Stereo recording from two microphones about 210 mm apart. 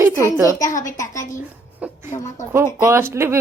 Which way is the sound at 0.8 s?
15° left (ahead or behind).